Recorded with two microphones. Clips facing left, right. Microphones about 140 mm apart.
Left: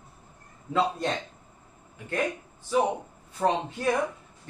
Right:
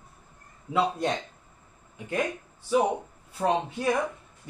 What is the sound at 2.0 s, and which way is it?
Speech, 20° right (ahead or behind).